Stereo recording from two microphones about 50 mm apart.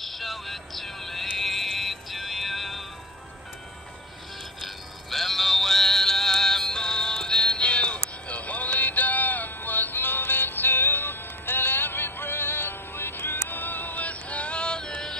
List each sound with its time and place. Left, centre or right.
0.0 s music: centre
4.6 s music: centre